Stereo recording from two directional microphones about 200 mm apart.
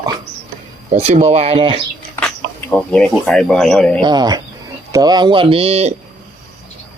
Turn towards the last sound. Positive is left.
turn(degrees=-30)  # may be behind; listen again after turning